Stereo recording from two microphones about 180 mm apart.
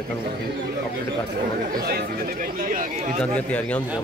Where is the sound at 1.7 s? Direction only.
55° right (ahead or behind).